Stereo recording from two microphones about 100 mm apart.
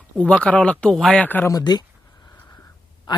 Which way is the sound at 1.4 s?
40° left (ahead or behind).